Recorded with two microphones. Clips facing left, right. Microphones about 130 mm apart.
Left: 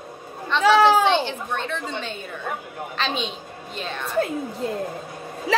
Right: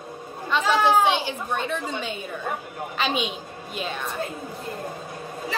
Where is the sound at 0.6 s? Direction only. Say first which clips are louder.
Left 7 dB; 75° left (ahead or behind).